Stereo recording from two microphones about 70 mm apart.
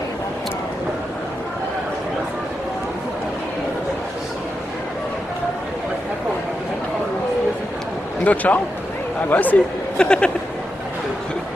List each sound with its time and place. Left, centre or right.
8.2 s a man's voice: left
9.9 s speech: centre